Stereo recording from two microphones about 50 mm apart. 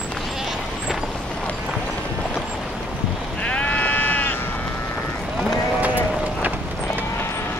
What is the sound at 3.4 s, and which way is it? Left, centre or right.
Sheep, left.